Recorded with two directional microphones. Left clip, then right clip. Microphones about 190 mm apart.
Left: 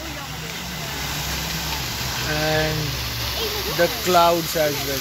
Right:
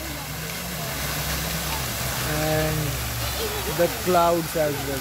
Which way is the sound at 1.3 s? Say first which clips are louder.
Left 2 dB; 65° right (ahead or behind).